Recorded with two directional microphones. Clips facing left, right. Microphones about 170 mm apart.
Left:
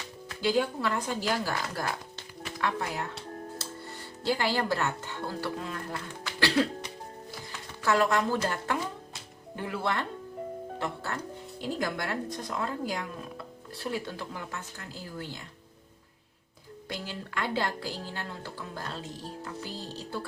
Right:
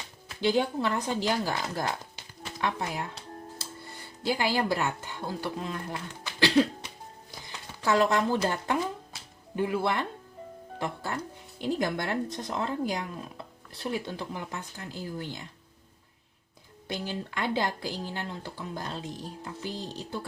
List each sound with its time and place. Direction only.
0.4 s speech: 25° right (ahead or behind)
4.2 s speech: 15° right (ahead or behind)
7.3 s a sound: 20° right (ahead or behind)
9.6 s speech: 15° right (ahead or behind)
16.9 s speech: 20° right (ahead or behind)